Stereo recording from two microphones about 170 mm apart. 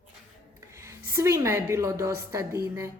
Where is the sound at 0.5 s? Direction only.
15° right (ahead or behind).